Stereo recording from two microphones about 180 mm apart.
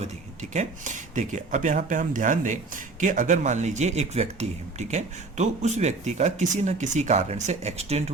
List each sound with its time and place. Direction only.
0.5 s speech: 40° right (ahead or behind)